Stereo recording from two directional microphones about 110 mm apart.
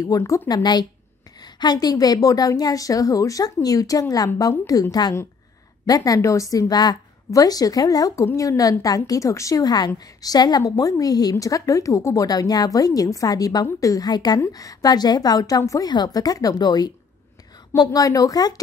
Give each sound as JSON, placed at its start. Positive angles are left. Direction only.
{"t": 0.2, "sound": "a woman's voice", "side_deg": 35}